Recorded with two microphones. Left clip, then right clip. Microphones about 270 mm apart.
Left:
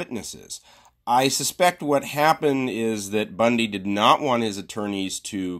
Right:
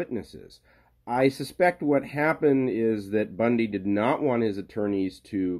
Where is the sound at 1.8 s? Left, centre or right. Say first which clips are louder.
Left 4 dB; left.